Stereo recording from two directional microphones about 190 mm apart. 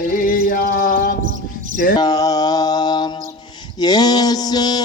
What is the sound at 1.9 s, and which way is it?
Mantra, 20° left (ahead or behind).